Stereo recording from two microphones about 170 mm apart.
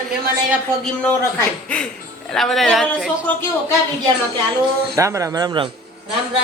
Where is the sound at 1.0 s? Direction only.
10° left (ahead or behind).